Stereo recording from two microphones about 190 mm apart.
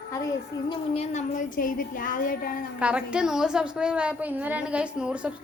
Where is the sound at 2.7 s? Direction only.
5° right (ahead or behind).